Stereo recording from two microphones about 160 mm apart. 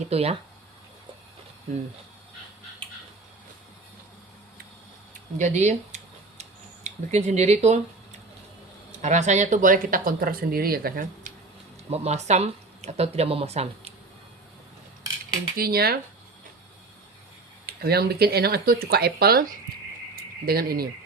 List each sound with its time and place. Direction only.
0.0 s speech: 40° right (ahead or behind)
5.4 s tick-tock: 50° right (ahead or behind)
8.9 s speech: 50° right (ahead or behind); by 11.3 s 65° right (ahead or behind)
11.9 s speech: 45° right (ahead or behind)
15.5 s speech: 75° right (ahead or behind)
17.7 s speech: 75° right (ahead or behind)